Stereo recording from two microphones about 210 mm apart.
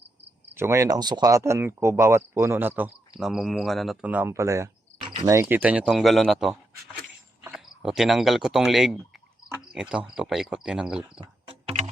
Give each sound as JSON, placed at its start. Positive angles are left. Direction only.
{"t": 0.5, "sound": "speech", "side_deg": -10}
{"t": 11.2, "sound": "music", "side_deg": -25}